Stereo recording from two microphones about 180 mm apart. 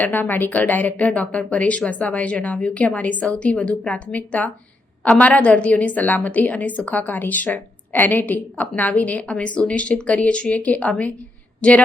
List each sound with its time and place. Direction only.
0.0 s a woman's voice: 10° left (ahead or behind)